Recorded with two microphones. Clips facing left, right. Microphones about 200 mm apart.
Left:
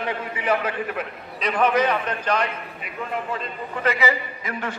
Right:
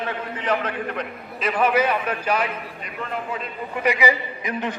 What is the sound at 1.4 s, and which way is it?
A man's voice, 5° right (ahead or behind).